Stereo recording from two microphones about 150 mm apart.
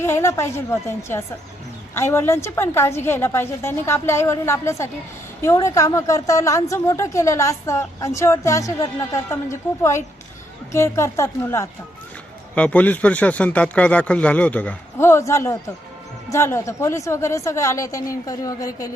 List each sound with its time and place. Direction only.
0.0 s a woman's voice: 15° left (ahead or behind)